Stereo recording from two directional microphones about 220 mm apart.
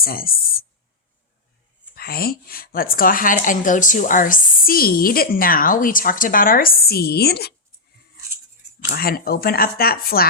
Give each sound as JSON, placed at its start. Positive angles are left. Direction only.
{"t": 0.0, "sound": "a woman's voice", "side_deg": 40}
{"t": 2.0, "sound": "a woman's voice", "side_deg": 45}
{"t": 8.9, "sound": "speech", "side_deg": 45}